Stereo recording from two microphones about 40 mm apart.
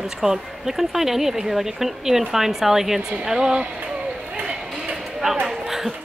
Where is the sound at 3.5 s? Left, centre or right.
Right.